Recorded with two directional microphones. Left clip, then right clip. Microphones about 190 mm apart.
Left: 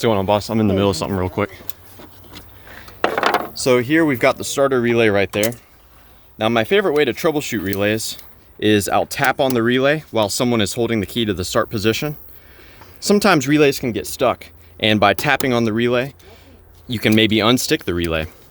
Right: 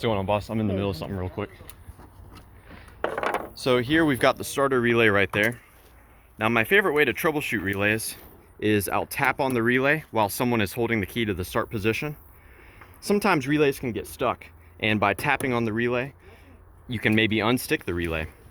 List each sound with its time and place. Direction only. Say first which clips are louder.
0.0 s speech: left 8 dB; 30° left (ahead or behind)
3.0 s a sound: left 10 dB; 60° left (ahead or behind)
3.6 s speech: left 5 dB; 15° left (ahead or behind); by 18.3 s 40° left (ahead or behind)